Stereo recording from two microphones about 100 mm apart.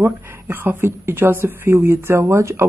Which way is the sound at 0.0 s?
25° right (ahead or behind).